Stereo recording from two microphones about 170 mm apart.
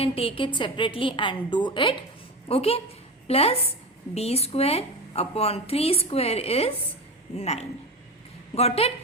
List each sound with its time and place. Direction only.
0.0 s a woman's voice: 35° left (ahead or behind)